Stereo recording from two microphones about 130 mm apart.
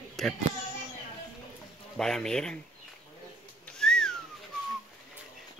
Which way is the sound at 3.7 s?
5° left (ahead or behind).